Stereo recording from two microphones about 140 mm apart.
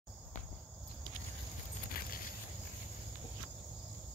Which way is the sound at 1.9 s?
90° left.